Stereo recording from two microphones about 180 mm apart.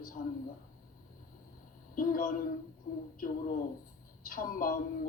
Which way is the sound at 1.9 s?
50° left (ahead or behind).